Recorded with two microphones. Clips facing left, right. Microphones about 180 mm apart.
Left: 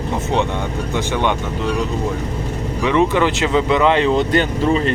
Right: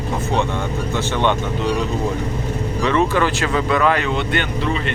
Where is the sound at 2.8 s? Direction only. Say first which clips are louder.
Left 2 dB; 15° left (ahead or behind).